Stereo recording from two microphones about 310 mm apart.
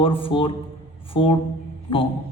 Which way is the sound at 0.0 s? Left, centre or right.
Centre.